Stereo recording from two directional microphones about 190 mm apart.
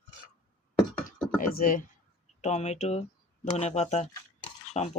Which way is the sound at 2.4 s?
35° left (ahead or behind).